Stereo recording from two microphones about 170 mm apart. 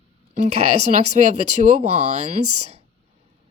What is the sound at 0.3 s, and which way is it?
Speech, 45° right (ahead or behind).